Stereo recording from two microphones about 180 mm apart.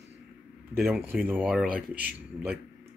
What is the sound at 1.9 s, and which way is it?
Speech, 60° right (ahead or behind).